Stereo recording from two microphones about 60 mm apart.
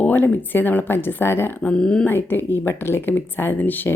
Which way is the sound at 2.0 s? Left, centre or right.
Left.